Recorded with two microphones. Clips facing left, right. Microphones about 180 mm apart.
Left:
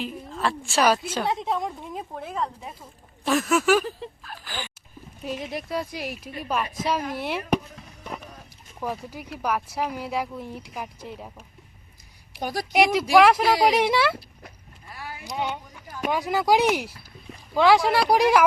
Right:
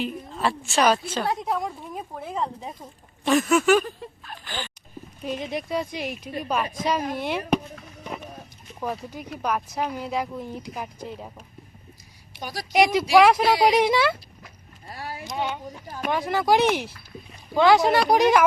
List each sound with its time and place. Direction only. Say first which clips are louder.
0.0 s a woman's voice: right 2 dB; centre (ahead or behind)
2.4 s speech: right 1 dB; 25° right (ahead or behind)
3.2 s a woman's voice: right 2 dB; centre (ahead or behind)
8.8 s a woman's voice: right 1 dB; 5° left (ahead or behind)
12.4 s a woman's voice: left 5 dB; 55° left (ahead or behind)
12.7 s a woman's voice: right 1 dB; centre (ahead or behind)
14.8 s vehicle: right 3 dB; 35° right (ahead or behind)
15.2 s speech: even; 15° left (ahead or behind)
17.6 s a woman's voice: right 1 dB; centre (ahead or behind)